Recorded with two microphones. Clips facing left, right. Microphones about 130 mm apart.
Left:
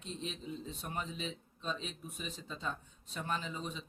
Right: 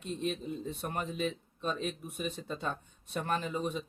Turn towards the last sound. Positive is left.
turn(degrees=-55)  # may be behind; listen again after turning